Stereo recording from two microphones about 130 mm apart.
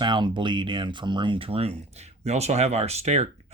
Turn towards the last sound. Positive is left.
turn(degrees=-55)  # may be behind; listen again after turning